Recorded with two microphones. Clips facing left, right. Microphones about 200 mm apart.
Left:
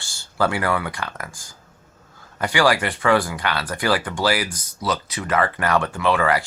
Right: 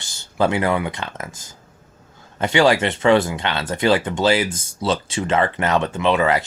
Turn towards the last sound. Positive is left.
turn(degrees=-20)  # may be behind; listen again after turning